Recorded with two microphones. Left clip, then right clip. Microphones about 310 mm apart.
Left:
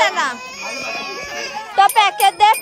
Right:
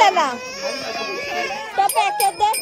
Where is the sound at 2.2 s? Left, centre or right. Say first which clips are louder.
Left 6 dB; left.